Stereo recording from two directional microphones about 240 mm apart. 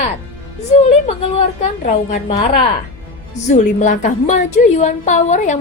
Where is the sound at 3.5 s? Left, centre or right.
Left.